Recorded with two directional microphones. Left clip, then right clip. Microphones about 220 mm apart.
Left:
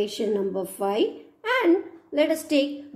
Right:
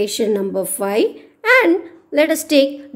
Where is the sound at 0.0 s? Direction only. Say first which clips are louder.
Right 7 dB; 30° right (ahead or behind).